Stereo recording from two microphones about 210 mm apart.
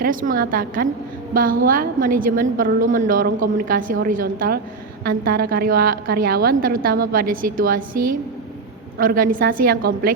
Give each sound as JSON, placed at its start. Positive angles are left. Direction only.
{"t": 0.0, "sound": "a woman's voice", "side_deg": -40}